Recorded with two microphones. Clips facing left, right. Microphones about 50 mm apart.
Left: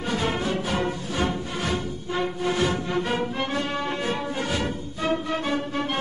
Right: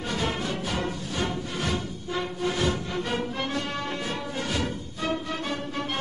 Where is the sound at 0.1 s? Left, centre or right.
Centre.